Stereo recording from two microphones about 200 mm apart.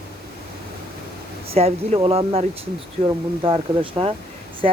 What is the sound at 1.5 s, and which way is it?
Speech, 30° right (ahead or behind).